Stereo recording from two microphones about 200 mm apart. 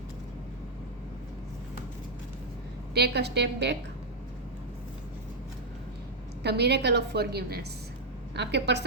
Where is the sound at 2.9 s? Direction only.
55° right (ahead or behind).